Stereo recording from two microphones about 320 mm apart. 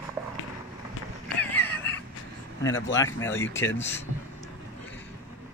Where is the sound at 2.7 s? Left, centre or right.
Left.